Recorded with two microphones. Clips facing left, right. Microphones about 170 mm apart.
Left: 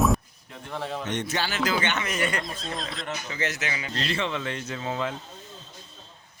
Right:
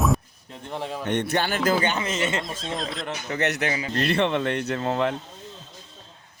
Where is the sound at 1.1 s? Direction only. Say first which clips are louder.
Right 8 dB; 55° right (ahead or behind).